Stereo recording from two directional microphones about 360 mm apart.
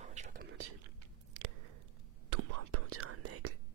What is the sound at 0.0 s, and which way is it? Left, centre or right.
Whispering, centre.